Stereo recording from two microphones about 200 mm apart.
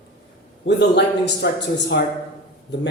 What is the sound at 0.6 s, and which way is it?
A man's voice, 60° left (ahead or behind).